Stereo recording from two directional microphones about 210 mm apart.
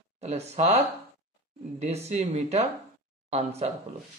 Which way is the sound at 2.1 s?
35° right (ahead or behind).